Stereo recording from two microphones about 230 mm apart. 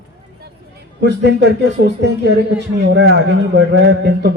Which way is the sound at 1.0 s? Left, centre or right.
Right.